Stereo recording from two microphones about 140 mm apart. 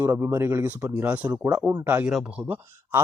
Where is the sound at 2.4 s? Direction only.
15° right (ahead or behind).